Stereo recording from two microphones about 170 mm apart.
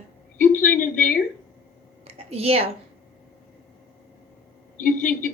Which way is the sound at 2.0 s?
35° right (ahead or behind).